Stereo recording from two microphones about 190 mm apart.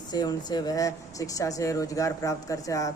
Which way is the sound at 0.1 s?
20° left (ahead or behind).